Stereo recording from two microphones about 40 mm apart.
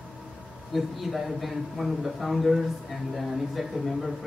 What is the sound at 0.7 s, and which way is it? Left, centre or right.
A man's voice, centre.